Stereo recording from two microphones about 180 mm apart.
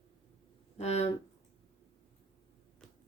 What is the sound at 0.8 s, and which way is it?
Speech, 35° left (ahead or behind).